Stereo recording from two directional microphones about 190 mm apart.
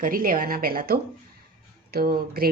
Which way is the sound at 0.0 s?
50° right (ahead or behind).